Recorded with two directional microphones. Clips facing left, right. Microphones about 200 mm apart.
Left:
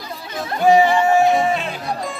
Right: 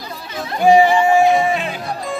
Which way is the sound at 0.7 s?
15° right (ahead or behind).